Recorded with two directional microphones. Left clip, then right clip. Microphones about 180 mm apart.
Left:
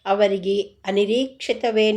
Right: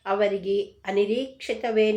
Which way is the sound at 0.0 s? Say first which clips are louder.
Left 5 dB; 40° left (ahead or behind).